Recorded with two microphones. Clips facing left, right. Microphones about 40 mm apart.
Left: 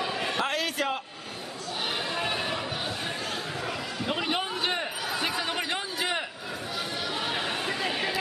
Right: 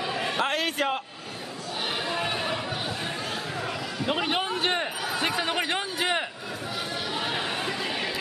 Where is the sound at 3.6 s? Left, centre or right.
Centre.